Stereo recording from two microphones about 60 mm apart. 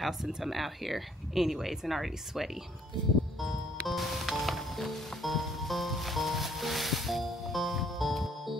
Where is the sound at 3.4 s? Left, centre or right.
Centre.